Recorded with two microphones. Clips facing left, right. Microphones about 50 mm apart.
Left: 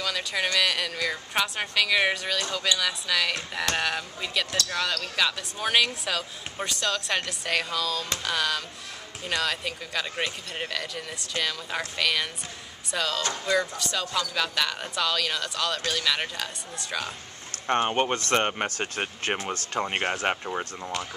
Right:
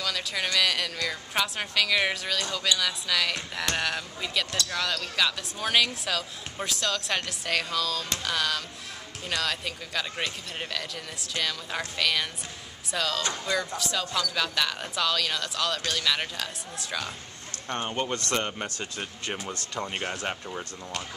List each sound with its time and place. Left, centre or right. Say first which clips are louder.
0.0 s speech: left 2 dB; centre
17.6 s speech: left 6 dB; left